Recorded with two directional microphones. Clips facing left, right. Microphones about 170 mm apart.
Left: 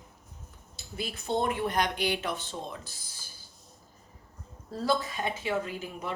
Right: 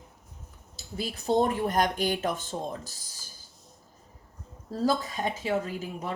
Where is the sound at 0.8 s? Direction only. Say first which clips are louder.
Right 2 dB; 40° right (ahead or behind).